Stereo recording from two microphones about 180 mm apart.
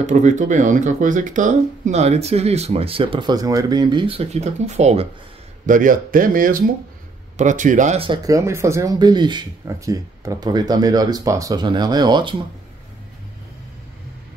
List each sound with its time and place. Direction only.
0.0 s speech: 45° right (ahead or behind)
8.0 s speech: 25° right (ahead or behind)